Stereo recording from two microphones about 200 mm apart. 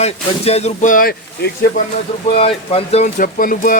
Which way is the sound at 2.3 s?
30° left (ahead or behind).